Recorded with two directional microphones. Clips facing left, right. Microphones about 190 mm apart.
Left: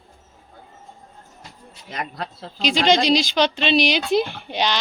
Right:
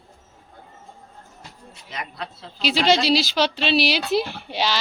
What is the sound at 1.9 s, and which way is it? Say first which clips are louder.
Speech: left 3 dB; 45° left (ahead or behind).